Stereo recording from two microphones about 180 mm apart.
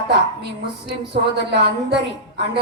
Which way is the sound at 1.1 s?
70° right (ahead or behind).